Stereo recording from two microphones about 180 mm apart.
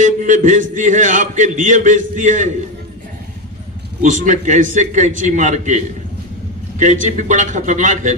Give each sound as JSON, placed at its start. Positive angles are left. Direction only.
{"t": 0.0, "sound": "a man's voice", "side_deg": -45}
{"t": 4.0, "sound": "a man's voice", "side_deg": -45}